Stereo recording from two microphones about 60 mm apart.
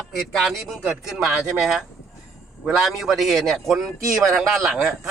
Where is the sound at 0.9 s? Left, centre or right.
Centre.